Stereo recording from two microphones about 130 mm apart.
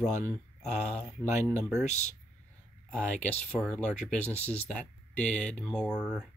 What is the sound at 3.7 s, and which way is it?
Speech, 5° left (ahead or behind).